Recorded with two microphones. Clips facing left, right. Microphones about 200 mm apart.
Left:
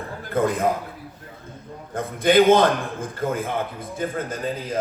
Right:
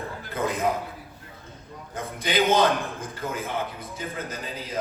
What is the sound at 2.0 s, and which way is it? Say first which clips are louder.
A man's voice: left 8 dB; 50° left (ahead or behind).